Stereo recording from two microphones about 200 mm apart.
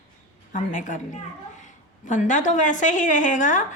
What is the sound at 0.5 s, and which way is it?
Speech, 40° left (ahead or behind).